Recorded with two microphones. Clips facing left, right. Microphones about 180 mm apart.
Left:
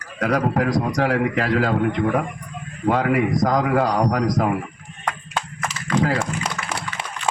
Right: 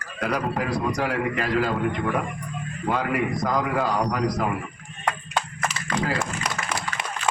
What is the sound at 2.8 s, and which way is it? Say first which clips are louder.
A man's voice: left 6 dB; 55° left (ahead or behind).